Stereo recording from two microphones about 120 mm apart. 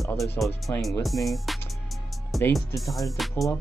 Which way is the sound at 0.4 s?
10° left (ahead or behind).